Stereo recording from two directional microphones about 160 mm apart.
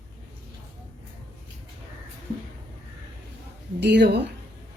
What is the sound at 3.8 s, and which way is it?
Speech, 90° right.